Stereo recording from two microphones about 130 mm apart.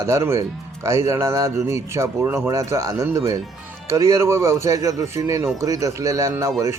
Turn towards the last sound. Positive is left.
turn(degrees=-25)  # may be behind; listen again after turning